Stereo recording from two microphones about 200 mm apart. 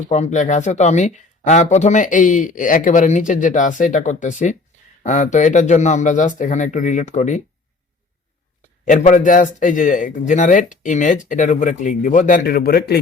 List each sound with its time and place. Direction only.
0.1 s speech: 35° left (ahead or behind)
8.8 s speech: 40° left (ahead or behind)